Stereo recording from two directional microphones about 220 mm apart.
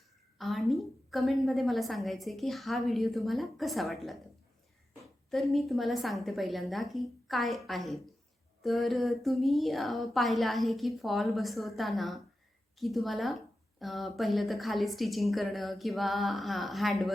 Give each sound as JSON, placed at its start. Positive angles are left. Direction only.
{"t": 0.3, "sound": "speech", "side_deg": 0}
{"t": 5.3, "sound": "speech", "side_deg": 0}